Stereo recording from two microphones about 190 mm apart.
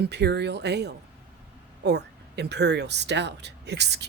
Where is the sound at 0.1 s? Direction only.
60° right (ahead or behind).